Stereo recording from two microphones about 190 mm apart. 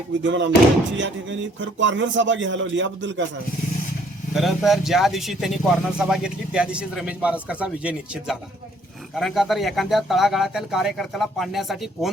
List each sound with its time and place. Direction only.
0.2 s a man's voice: 75° right (ahead or behind)
4.4 s speech: centre (ahead or behind)